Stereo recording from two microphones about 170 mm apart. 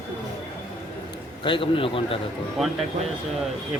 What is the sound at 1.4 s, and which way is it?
Speech, 30° left (ahead or behind).